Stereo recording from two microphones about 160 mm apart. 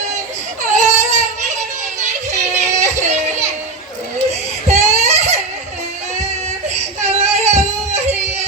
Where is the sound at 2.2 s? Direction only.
45° right (ahead or behind).